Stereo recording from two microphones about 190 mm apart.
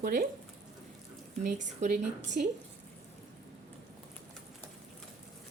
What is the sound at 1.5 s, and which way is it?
Speech, 40° right (ahead or behind).